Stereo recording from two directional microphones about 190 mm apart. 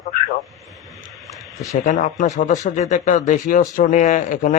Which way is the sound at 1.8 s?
40° left (ahead or behind).